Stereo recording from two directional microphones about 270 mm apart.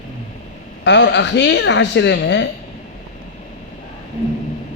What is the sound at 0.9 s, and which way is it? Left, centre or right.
A man's voice, left.